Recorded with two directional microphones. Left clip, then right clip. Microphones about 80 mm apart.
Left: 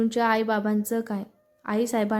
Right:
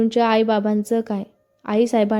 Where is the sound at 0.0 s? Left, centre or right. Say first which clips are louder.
Right 6 dB; right.